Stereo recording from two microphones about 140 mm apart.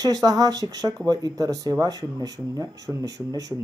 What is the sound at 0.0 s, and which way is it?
Speech, 25° right (ahead or behind).